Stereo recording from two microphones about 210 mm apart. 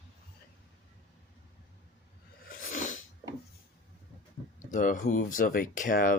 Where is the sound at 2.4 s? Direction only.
40° left (ahead or behind).